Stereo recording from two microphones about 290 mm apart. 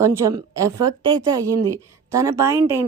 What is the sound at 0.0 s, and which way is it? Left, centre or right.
A woman's voice, centre.